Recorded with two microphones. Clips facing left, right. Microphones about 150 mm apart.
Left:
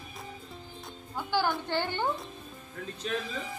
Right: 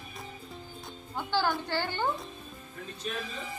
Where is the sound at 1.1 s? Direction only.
15° left (ahead or behind).